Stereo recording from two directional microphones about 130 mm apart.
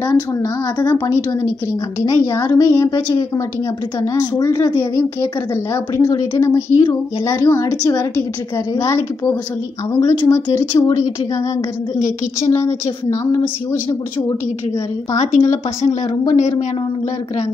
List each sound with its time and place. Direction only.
0.0 s a woman's voice: 25° left (ahead or behind)
9.9 s a woman's voice: 20° left (ahead or behind)
13.1 s a woman's voice: 25° left (ahead or behind)
15.1 s speech: 65° left (ahead or behind)